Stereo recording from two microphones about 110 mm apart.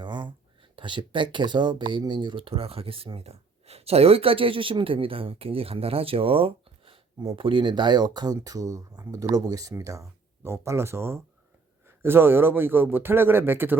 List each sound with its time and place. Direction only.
0.0 s a man's voice: 45° right (ahead or behind); by 13.7 s 20° right (ahead or behind)